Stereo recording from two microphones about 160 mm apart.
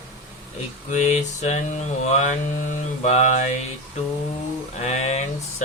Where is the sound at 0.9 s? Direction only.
50° left (ahead or behind).